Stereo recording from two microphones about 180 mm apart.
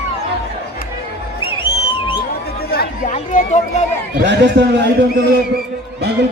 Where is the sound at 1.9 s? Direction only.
25° left (ahead or behind).